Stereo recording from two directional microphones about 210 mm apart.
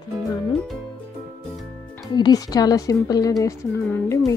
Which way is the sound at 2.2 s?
20° left (ahead or behind).